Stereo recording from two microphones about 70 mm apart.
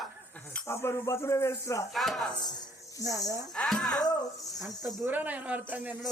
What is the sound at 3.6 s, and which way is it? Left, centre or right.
Speech, centre.